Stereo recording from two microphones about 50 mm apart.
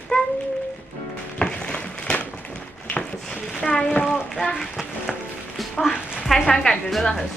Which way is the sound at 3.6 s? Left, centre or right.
Centre.